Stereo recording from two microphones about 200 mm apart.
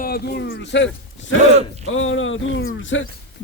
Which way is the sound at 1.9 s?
75° left (ahead or behind).